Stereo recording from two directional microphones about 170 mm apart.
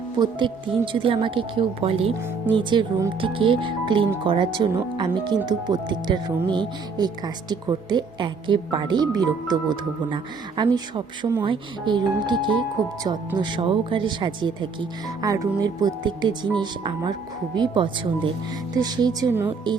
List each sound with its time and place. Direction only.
0.2 s speech: 30° right (ahead or behind)